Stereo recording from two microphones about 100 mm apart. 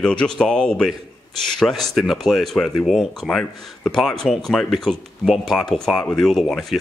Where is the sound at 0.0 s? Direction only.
10° left (ahead or behind).